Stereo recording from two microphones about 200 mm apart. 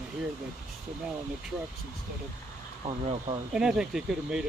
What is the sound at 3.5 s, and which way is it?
Speech, 5° right (ahead or behind).